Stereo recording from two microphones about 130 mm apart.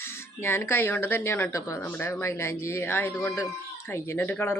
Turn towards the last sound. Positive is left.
turn(degrees=15)  # may be behind; listen again after turning